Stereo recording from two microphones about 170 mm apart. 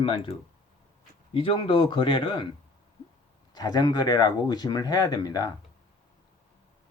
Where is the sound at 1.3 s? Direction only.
30° left (ahead or behind).